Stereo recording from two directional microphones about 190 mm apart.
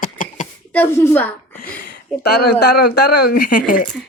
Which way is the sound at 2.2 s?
60° left (ahead or behind).